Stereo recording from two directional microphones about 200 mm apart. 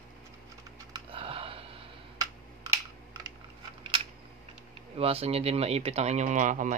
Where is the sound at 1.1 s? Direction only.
30° right (ahead or behind).